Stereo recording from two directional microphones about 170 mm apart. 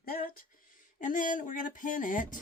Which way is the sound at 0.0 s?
60° left (ahead or behind).